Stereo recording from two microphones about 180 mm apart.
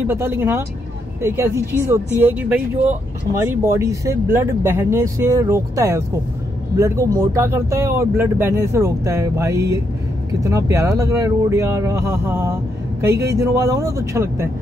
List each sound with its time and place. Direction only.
0.0 s speech: 15° right (ahead or behind)